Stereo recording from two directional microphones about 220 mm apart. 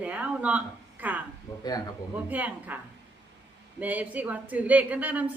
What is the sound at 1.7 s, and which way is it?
Speech, 15° left (ahead or behind).